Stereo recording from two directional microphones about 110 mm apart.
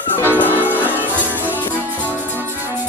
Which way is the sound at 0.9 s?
15° right (ahead or behind).